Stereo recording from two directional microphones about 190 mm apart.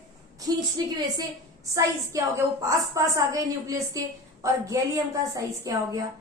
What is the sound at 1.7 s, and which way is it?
A woman's voice, 15° right (ahead or behind).